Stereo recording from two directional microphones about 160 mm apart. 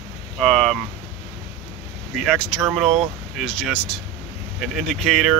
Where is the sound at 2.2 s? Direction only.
5° left (ahead or behind).